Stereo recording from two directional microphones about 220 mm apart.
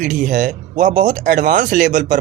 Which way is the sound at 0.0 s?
35° right (ahead or behind).